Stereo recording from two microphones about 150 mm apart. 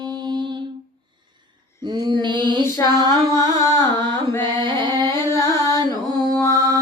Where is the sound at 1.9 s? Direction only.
30° right (ahead or behind).